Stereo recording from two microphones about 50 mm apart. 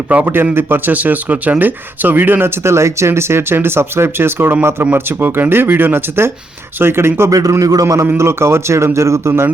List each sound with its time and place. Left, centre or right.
0.1 s speech: right
0.5 s speech: right
0.9 s speech: right
2.6 s speech: right
3.1 s speech: right
8.2 s speech: right